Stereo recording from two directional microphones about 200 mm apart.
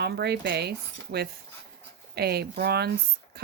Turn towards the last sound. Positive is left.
turn(degrees=-55)  # may be behind; listen again after turning